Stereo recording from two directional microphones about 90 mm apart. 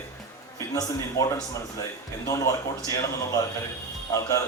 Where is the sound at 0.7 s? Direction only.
40° left (ahead or behind).